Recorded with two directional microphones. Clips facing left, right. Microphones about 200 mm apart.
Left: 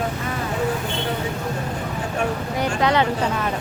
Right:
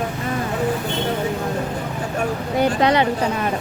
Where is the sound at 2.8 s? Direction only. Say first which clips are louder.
Even; 20° right (ahead or behind).